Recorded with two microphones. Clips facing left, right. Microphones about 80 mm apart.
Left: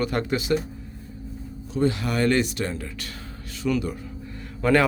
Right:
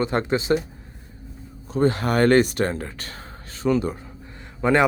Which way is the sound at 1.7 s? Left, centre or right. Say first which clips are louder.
Right 3 dB; right.